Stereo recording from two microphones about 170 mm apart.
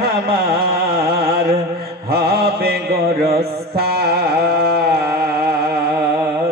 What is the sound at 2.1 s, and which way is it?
Mantra, 65° right (ahead or behind).